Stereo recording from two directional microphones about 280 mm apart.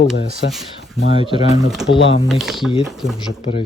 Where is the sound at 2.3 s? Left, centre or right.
Centre.